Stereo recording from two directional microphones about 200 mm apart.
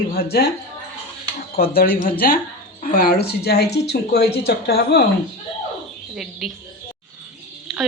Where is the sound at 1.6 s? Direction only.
50° left (ahead or behind).